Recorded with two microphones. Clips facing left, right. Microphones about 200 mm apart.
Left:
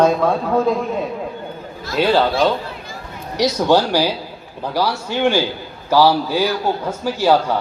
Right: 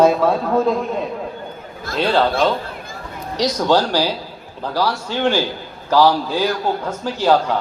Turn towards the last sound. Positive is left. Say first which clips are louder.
# left 1 dB
turn(degrees=10)  # may be behind; listen again after turning